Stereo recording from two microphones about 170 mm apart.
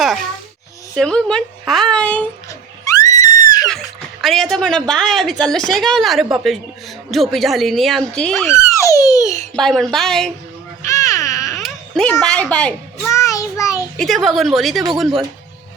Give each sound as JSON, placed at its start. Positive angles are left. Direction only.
{"t": 0.9, "sound": "a woman's voice", "side_deg": 5}
{"t": 2.5, "sound": "screaming", "side_deg": 20}
{"t": 3.7, "sound": "a woman's voice", "side_deg": 0}
{"t": 8.4, "sound": "a sound", "side_deg": 15}
{"t": 9.6, "sound": "a woman's voice", "side_deg": 5}
{"t": 10.8, "sound": "baby cry", "side_deg": 20}
{"t": 11.5, "sound": "baby cry", "side_deg": 5}
{"t": 12.2, "sound": "a woman's voice", "side_deg": 5}
{"t": 13.1, "sound": "child singing", "side_deg": 20}
{"t": 13.9, "sound": "a woman's voice", "side_deg": 0}